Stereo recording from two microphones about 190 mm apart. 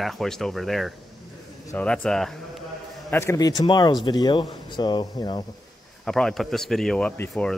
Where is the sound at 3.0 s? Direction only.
15° left (ahead or behind).